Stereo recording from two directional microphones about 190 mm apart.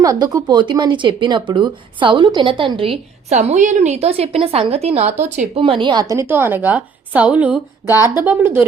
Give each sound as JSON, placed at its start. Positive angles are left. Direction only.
{"t": 0.0, "sound": "speech", "side_deg": -20}
{"t": 7.9, "sound": "speech", "side_deg": 20}
{"t": 8.2, "sound": "speech", "side_deg": -10}